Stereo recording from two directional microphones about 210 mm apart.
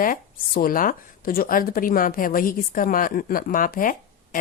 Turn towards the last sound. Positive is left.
turn(degrees=40)  # may be behind; listen again after turning